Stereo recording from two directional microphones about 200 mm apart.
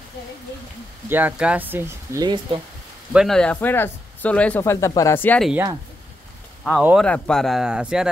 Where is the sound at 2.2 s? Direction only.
25° right (ahead or behind).